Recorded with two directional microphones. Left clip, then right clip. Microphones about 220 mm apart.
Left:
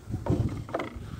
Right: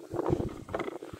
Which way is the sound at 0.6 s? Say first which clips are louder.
Left 3 dB; 10° left (ahead or behind).